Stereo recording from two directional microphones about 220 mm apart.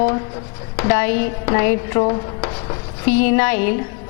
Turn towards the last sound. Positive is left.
turn(degrees=10)  # may be behind; listen again after turning